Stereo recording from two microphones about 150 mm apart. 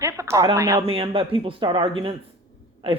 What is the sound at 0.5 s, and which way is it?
Speech, 20° right (ahead or behind).